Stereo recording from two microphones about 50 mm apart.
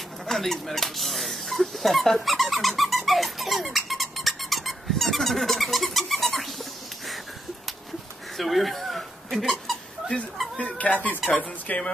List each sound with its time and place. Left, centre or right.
0.3 s speech: centre
3.6 s squeak: centre
8.4 s a sound: centre
10.3 s dog: centre
10.6 s cat: left
11.7 s speech: left